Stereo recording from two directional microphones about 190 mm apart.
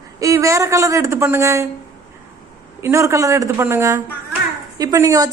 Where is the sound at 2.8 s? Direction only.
15° right (ahead or behind).